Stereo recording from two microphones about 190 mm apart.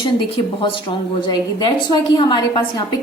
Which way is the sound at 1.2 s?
20° left (ahead or behind).